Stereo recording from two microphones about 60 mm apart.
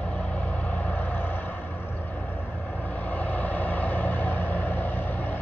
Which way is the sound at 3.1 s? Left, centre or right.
Left.